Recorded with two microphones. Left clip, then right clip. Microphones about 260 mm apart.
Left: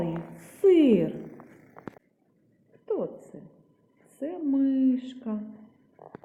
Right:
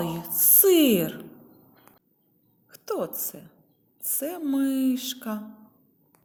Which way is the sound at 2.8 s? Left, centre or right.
Right.